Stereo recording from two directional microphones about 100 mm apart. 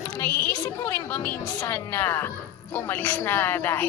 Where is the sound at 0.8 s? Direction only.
20° left (ahead or behind).